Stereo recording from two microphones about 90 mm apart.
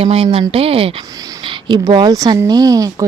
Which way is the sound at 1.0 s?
45° right (ahead or behind).